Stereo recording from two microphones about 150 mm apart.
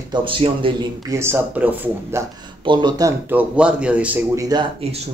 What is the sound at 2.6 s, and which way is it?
Speech, 30° right (ahead or behind).